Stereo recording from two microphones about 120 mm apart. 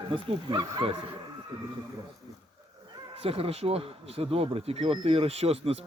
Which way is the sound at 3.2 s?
55° right (ahead or behind).